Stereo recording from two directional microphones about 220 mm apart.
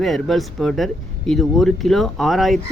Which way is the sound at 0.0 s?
Centre (ahead or behind).